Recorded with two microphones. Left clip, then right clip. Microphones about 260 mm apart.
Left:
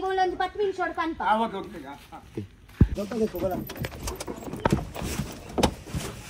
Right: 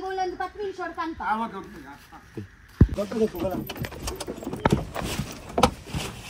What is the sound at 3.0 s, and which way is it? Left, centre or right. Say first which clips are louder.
Speech: right 3 dB; centre.